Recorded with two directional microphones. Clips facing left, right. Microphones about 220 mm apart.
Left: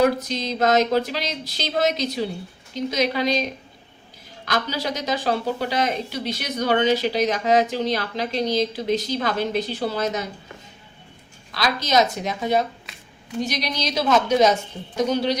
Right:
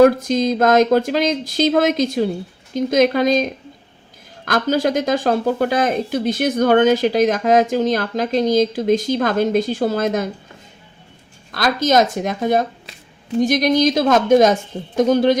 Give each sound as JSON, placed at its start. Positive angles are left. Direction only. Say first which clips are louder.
{"t": 0.0, "sound": "speech", "louder": "right 8 dB", "side_deg": -50}
{"t": 11.5, "sound": "speech", "louder": "right 5 dB", "side_deg": -50}